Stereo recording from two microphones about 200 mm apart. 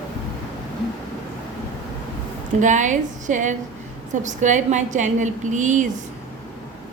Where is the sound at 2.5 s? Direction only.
40° right (ahead or behind).